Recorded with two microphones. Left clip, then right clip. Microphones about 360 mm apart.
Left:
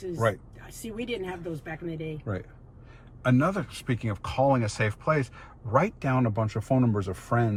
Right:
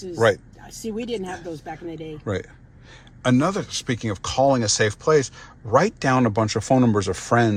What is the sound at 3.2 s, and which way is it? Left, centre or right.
Speech, centre.